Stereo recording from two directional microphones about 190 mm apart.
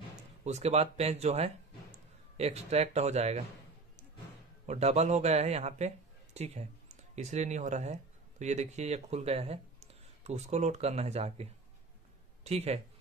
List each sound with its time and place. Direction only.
0.4 s speech: 35° right (ahead or behind)
4.6 s a man's voice: 35° right (ahead or behind)
12.4 s speech: 35° right (ahead or behind)